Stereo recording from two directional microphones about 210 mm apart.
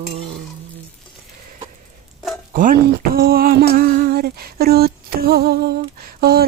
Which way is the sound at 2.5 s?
40° right (ahead or behind).